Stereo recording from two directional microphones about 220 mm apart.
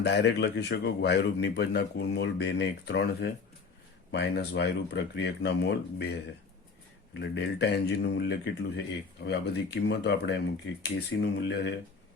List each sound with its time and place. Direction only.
0.0 s a man's voice: 50° left (ahead or behind)
7.1 s a man's voice: 50° left (ahead or behind)